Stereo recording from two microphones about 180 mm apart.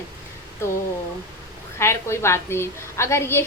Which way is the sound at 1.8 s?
15° left (ahead or behind).